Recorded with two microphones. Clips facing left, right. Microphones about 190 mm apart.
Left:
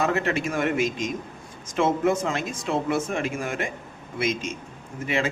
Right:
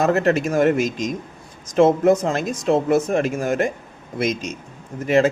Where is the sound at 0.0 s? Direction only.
40° right (ahead or behind).